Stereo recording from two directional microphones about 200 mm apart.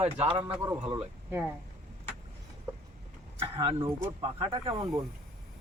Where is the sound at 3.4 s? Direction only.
25° right (ahead or behind).